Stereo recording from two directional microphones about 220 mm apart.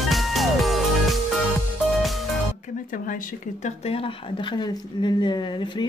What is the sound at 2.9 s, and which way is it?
Speech, 40° left (ahead or behind).